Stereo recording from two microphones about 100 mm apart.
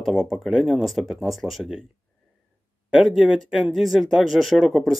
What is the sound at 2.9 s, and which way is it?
Speech, 5° right (ahead or behind).